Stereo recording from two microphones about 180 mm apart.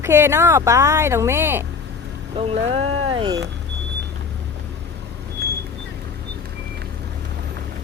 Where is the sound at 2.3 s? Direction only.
35° right (ahead or behind).